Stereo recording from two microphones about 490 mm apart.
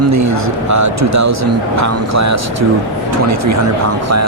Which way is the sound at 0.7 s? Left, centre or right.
Right.